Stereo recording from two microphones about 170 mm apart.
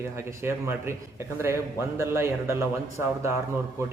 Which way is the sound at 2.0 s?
15° right (ahead or behind).